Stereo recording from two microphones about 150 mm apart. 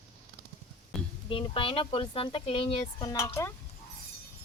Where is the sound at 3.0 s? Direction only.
20° left (ahead or behind).